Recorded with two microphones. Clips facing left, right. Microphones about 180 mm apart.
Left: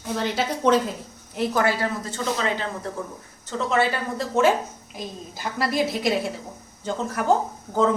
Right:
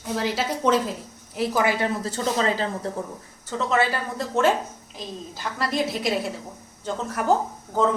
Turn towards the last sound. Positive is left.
turn(degrees=0)  # may be behind; listen again after turning